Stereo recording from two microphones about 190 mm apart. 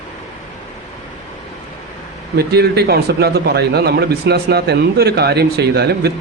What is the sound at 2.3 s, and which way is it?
Speech, 60° right (ahead or behind).